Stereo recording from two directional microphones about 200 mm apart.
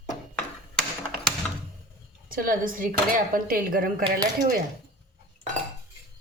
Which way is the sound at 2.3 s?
45° right (ahead or behind).